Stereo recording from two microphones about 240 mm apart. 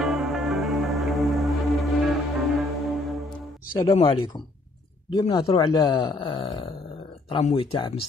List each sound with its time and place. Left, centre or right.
0.0 s music: centre
3.7 s speech: left
5.1 s speech: left